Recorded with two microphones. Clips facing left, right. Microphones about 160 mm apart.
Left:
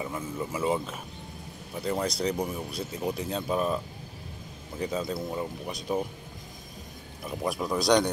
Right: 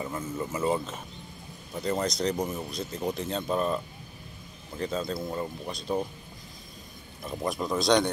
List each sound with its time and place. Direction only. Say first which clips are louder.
0.0 s speech: even; 5° left (ahead or behind)
1.8 s speech: right 1 dB; 5° left (ahead or behind)
7.2 s speech: even; 5° left (ahead or behind)